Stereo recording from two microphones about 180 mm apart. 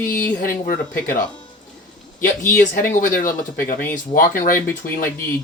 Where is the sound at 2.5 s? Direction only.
50° left (ahead or behind).